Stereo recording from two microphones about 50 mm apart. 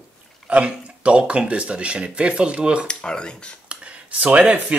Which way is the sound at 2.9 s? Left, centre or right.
Centre.